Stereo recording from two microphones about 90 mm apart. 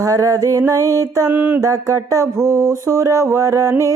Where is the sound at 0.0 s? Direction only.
40° right (ahead or behind).